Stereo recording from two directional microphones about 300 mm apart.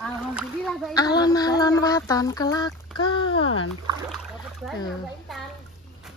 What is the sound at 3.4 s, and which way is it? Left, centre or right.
Speech, left.